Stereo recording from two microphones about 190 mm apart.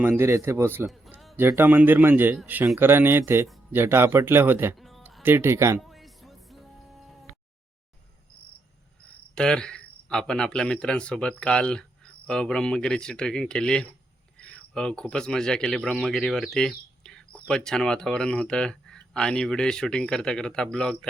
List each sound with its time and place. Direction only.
0.0 s a man's voice: 10° right (ahead or behind)
0.9 s a sound: centre (ahead or behind)
1.4 s a man's voice: 10° right (ahead or behind)
4.8 s music: centre (ahead or behind)
5.2 s a man's voice: 10° right (ahead or behind)
5.8 s music: centre (ahead or behind)
9.3 s speech: 5° left (ahead or behind)